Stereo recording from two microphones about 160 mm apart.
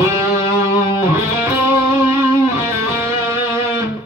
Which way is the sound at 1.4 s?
15° right (ahead or behind).